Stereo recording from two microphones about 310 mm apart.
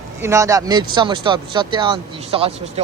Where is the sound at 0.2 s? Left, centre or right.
Centre.